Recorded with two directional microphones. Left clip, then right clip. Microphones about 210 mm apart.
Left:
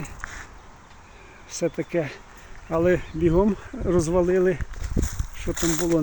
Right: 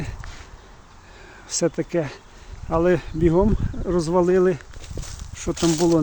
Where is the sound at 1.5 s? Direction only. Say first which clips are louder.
Right 3 dB; 20° right (ahead or behind).